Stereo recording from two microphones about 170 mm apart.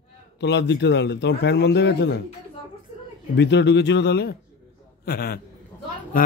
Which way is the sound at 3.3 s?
90° left.